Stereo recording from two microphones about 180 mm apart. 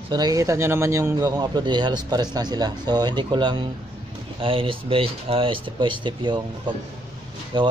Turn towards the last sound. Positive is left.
turn(degrees=-25)  # may be behind; listen again after turning